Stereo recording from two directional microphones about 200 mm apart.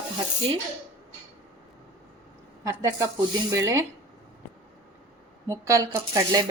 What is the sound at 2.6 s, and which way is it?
Speech, 15° right (ahead or behind).